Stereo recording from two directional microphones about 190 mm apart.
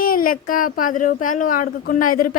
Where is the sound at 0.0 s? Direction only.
50° left (ahead or behind).